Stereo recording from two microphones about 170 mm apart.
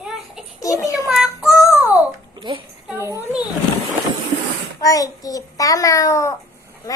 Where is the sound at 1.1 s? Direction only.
5° right (ahead or behind).